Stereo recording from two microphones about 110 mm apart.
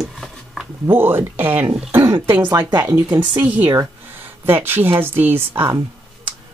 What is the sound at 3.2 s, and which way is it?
Speech, 15° right (ahead or behind).